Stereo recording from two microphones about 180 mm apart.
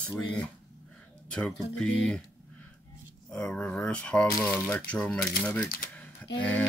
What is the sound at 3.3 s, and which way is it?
Speech, 5° left (ahead or behind).